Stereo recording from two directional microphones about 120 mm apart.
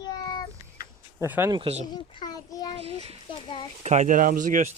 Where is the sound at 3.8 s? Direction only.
80° right.